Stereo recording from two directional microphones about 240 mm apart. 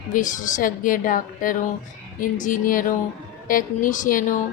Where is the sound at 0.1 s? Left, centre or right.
Left.